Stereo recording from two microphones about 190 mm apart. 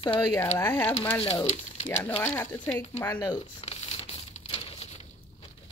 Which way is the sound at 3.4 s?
35° left (ahead or behind).